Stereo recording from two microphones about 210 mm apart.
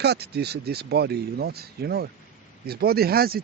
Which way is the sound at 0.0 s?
50° right (ahead or behind).